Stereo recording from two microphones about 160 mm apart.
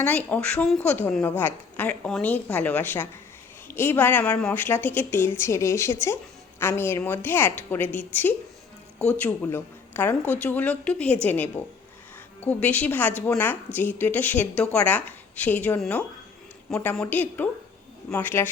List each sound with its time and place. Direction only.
0.0 s a woman's voice: 10° left (ahead or behind)